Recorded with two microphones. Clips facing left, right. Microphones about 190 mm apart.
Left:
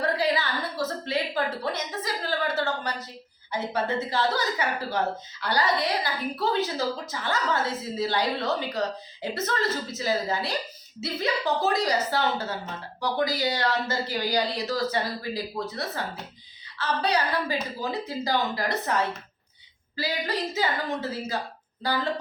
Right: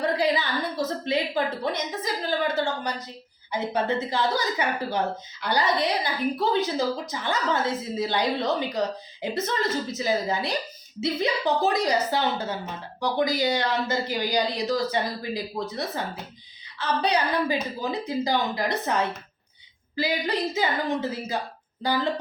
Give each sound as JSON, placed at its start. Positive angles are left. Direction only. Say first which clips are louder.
{"t": 0.0, "sound": "a woman's voice", "louder": "right 2 dB", "side_deg": -15}